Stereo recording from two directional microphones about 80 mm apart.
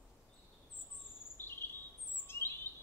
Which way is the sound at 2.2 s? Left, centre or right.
Left.